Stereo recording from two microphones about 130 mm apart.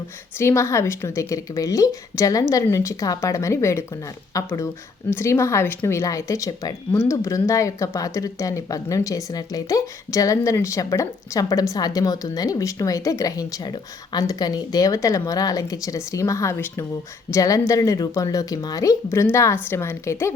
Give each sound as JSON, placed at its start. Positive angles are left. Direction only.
{"t": 0.3, "sound": "speech", "side_deg": 20}